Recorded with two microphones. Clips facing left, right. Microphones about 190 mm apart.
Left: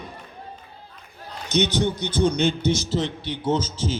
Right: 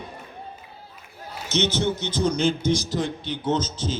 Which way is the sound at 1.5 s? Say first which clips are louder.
Left 2 dB; 15° left (ahead or behind).